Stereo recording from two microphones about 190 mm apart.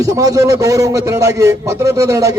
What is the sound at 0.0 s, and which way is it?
A man's voice, 20° right (ahead or behind).